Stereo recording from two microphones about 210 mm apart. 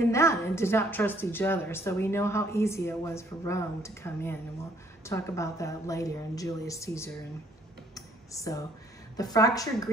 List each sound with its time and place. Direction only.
0.0 s a woman's voice: 15° left (ahead or behind)
7.9 s a sound: 15° left (ahead or behind)
9.1 s a woman's voice: 15° left (ahead or behind)